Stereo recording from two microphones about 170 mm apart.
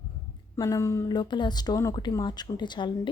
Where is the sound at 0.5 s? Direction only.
20° left (ahead or behind).